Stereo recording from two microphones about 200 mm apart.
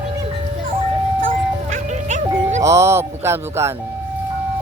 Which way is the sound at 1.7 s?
35° right (ahead or behind).